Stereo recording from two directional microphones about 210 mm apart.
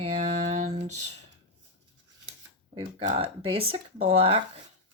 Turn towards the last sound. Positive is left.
turn(degrees=-25)  # may be behind; listen again after turning